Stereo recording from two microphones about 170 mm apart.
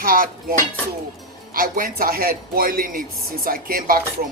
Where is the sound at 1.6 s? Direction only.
55° right (ahead or behind).